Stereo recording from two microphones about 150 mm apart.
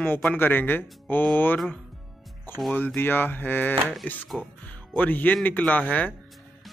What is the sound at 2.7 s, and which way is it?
Speech, 10° left (ahead or behind).